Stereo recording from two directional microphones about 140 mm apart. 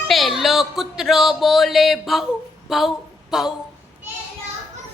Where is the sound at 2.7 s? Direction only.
Centre (ahead or behind).